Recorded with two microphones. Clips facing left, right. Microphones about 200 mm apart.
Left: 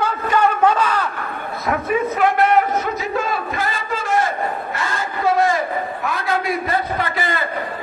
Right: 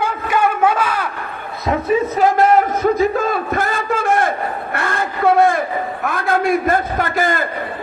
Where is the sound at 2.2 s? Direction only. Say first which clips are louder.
Right 2 dB; 45° right (ahead or behind).